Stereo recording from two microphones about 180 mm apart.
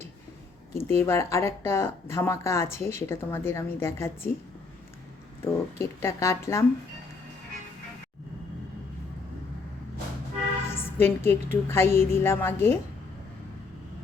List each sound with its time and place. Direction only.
0.8 s speech: 15° left (ahead or behind)
5.5 s speech: 15° left (ahead or behind)
10.7 s speech: 10° left (ahead or behind)